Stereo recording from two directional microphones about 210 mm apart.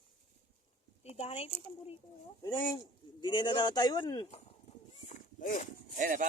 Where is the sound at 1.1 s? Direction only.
30° left (ahead or behind).